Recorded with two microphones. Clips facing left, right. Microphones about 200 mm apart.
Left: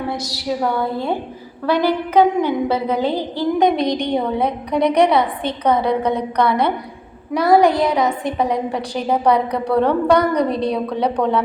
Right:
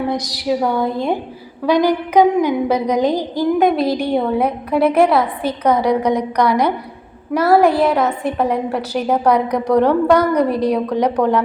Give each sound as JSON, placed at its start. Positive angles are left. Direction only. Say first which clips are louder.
{"t": 0.1, "sound": "a woman's voice", "louder": "right 4 dB", "side_deg": -15}